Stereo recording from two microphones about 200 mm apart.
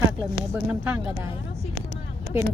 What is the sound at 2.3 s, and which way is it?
Speech, 10° right (ahead or behind).